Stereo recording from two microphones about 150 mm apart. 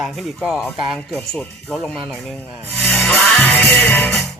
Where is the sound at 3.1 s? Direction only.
10° left (ahead or behind).